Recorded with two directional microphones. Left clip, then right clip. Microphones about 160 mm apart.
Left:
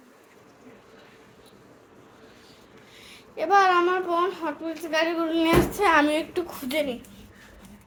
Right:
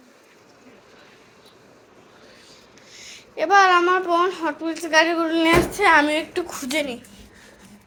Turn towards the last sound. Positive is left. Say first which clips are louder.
# right 2 dB
turn(degrees=-5)  # may be behind; listen again after turning